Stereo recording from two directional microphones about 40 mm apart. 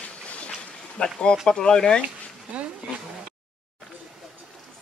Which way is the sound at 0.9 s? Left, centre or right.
Centre.